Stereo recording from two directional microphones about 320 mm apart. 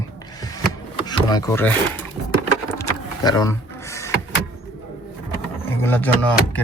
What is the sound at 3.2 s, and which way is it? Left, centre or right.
Speech, centre.